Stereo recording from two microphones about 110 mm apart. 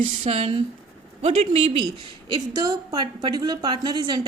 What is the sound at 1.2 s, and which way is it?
Speech, 70° right (ahead or behind).